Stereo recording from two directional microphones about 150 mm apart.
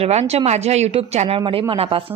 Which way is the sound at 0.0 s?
45° right (ahead or behind).